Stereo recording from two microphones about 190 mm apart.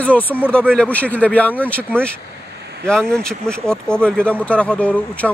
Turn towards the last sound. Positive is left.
turn(degrees=5)  # may be behind; listen again after turning